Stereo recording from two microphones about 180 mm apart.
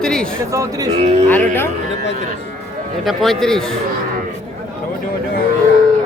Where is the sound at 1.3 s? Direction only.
10° left (ahead or behind).